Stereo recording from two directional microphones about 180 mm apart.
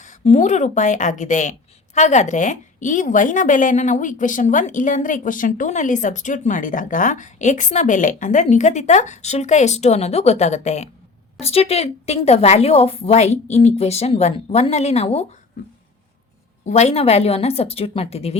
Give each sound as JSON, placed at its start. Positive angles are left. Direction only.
{"t": 0.0, "sound": "a woman's voice", "side_deg": 40}
{"t": 16.6, "sound": "a woman's voice", "side_deg": 40}